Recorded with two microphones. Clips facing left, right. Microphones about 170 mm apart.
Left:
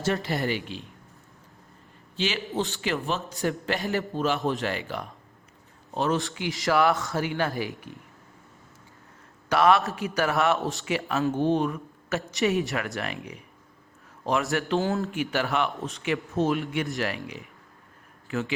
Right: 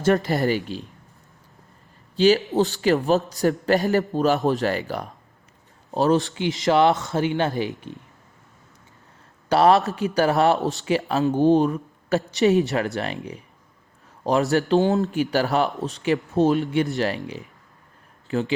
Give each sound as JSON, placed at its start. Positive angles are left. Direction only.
{"t": 0.0, "sound": "a man's voice", "side_deg": -45}
{"t": 2.1, "sound": "a man's voice", "side_deg": -40}
{"t": 6.3, "sound": "speech", "side_deg": -25}
{"t": 9.5, "sound": "a man's voice", "side_deg": -30}
{"t": 14.7, "sound": "speech", "side_deg": -20}
{"t": 15.0, "sound": "a man's voice", "side_deg": -35}
{"t": 18.3, "sound": "speech", "side_deg": -30}